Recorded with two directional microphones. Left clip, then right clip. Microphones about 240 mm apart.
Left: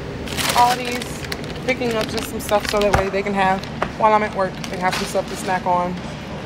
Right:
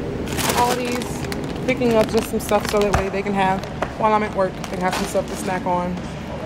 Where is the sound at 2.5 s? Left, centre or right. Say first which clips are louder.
Left 2 dB; centre.